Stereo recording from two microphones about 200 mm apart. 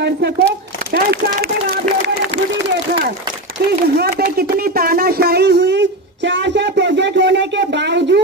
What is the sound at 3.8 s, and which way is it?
Speech, 55° right (ahead or behind).